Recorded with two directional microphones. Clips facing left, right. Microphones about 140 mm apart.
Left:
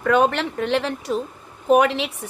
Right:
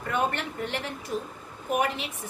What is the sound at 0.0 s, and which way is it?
Speech, 90° left.